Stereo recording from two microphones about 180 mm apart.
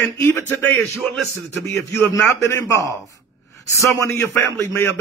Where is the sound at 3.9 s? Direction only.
15° left (ahead or behind).